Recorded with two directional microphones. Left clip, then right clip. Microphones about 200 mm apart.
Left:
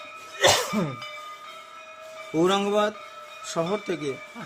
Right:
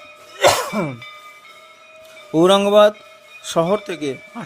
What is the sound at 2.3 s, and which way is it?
Speech, 40° right (ahead or behind).